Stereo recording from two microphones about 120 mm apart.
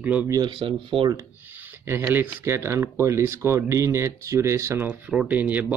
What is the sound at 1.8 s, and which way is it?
Speech, 20° right (ahead or behind).